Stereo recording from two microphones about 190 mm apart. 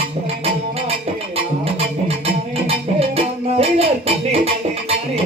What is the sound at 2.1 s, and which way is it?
Music, 30° right (ahead or behind).